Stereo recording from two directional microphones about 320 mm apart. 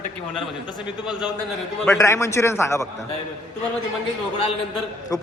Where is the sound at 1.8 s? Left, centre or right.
Centre.